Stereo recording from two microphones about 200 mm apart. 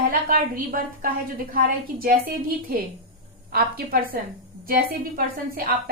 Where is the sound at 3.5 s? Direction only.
50° right (ahead or behind).